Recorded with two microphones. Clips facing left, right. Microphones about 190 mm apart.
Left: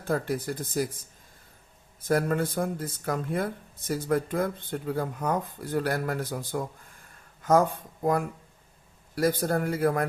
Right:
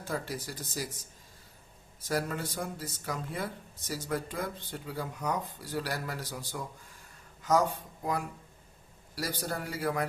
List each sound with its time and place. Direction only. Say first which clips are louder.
0.0 s speech: left 8 dB; 55° left (ahead or behind)